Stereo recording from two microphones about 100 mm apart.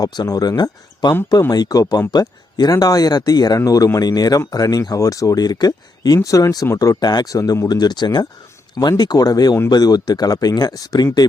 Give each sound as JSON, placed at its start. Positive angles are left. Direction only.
{"t": 0.0, "sound": "speech", "side_deg": 40}